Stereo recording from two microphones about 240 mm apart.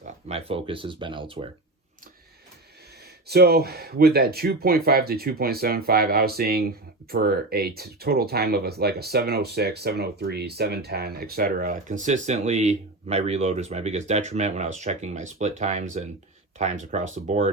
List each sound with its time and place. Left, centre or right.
0.3 s speech: right
3.2 s speech: right